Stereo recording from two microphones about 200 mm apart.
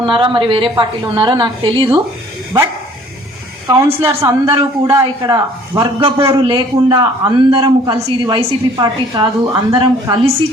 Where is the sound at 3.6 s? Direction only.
15° right (ahead or behind).